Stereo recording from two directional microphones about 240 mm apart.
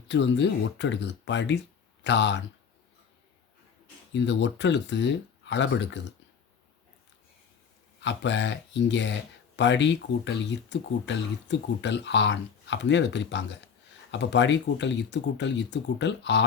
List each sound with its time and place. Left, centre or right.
0.1 s speech: left
4.1 s speech: left
8.0 s speech: left